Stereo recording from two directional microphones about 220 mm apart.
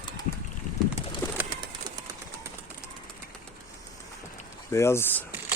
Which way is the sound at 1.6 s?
20° right (ahead or behind).